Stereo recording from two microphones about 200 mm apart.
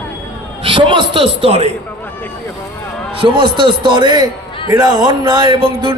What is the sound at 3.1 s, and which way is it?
A man's voice, 25° right (ahead or behind).